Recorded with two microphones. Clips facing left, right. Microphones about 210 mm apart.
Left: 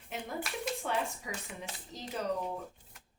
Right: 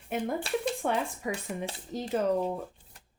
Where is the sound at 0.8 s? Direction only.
55° right (ahead or behind).